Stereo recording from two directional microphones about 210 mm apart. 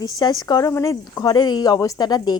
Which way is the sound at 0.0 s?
20° left (ahead or behind).